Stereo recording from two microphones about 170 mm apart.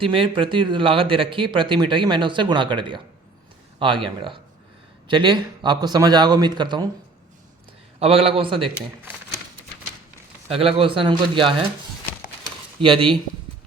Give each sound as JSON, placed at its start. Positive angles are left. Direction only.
{"t": 0.0, "sound": "speech", "side_deg": -30}
{"t": 7.9, "sound": "speech", "side_deg": -35}
{"t": 10.5, "sound": "speech", "side_deg": -35}
{"t": 12.8, "sound": "speech", "side_deg": -30}